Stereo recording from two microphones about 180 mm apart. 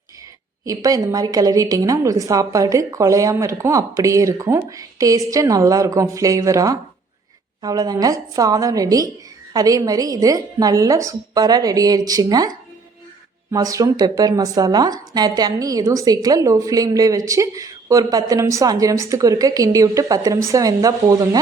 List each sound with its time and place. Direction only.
0.6 s speech: 20° right (ahead or behind)